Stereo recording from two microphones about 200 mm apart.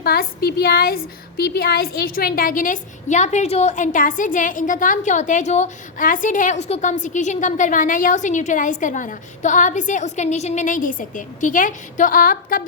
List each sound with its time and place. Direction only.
0.0 s a woman's voice: 50° left (ahead or behind)